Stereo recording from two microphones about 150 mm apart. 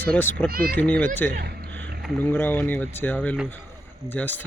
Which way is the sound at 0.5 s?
90° right.